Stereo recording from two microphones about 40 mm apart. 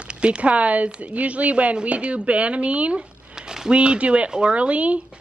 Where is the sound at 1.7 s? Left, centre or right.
Right.